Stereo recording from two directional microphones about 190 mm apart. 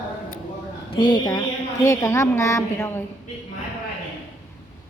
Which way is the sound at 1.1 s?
20° left (ahead or behind).